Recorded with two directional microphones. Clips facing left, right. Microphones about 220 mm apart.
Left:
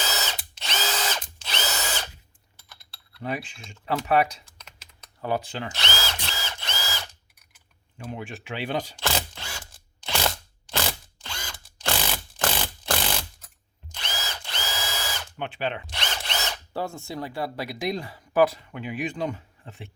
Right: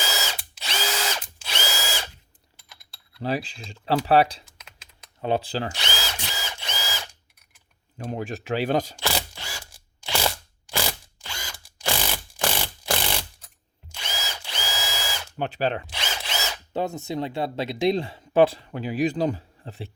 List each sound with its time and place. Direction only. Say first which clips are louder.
0.3 s drill: even; 10° right (ahead or behind)
3.2 s speech: right 4 dB; 35° right (ahead or behind)
5.7 s drill: left 1 dB; 15° right (ahead or behind)
7.9 s speech: right 5 dB; 40° right (ahead or behind)
9.0 s camera: even; 10° right (ahead or behind)
11.6 s mechanisms: right 1 dB; 10° right (ahead or behind)
13.9 s drill: even; 10° right (ahead or behind)
15.4 s speech: right 5 dB; 40° right (ahead or behind)
15.9 s drill: even; 5° right (ahead or behind)
16.7 s speech: right 5 dB; 20° right (ahead or behind)